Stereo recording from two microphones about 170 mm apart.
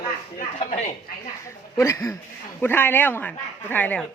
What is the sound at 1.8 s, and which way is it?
Speech, 15° left (ahead or behind).